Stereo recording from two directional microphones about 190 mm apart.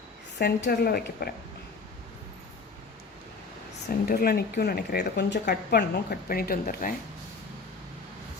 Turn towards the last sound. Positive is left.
turn(degrees=50)  # may be behind; listen again after turning